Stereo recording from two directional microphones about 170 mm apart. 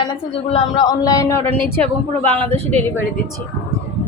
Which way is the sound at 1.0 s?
20° left (ahead or behind).